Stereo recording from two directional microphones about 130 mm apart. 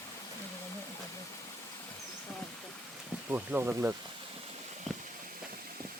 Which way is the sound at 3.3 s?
15° right (ahead or behind).